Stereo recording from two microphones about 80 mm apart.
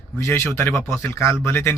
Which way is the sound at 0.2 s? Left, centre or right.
Left.